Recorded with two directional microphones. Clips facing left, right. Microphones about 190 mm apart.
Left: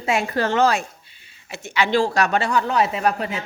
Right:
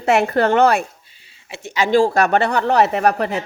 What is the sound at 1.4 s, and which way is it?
Speech, 30° right (ahead or behind).